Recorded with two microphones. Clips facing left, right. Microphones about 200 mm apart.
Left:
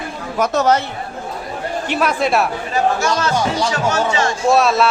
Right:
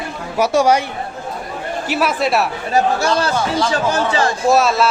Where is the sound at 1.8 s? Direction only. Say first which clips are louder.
Even; 5° right (ahead or behind).